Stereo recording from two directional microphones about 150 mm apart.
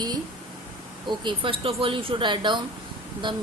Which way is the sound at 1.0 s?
30° right (ahead or behind).